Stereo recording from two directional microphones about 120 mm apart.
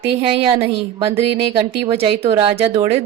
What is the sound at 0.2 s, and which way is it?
Speech, 55° right (ahead or behind).